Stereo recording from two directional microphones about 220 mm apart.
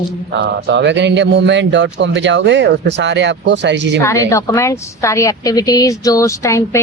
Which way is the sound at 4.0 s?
15° left (ahead or behind).